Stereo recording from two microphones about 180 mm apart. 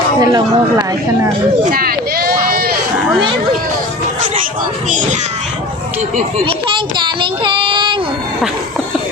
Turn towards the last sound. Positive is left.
turn(degrees=-25)  # may be behind; listen again after turning